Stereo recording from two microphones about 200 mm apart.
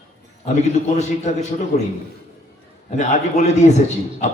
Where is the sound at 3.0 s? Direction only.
35° left (ahead or behind).